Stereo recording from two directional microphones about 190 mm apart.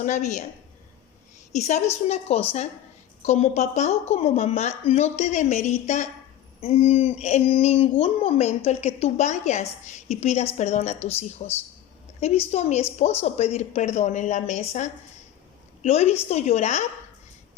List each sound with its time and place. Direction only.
0.0 s speech: 40° left (ahead or behind)
1.5 s speech: 35° left (ahead or behind)